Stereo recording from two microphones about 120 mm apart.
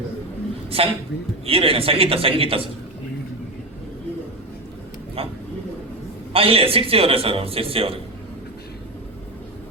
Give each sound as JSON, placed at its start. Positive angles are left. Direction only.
{"t": 0.7, "sound": "a man's voice", "side_deg": -55}
{"t": 6.3, "sound": "a man's voice", "side_deg": -50}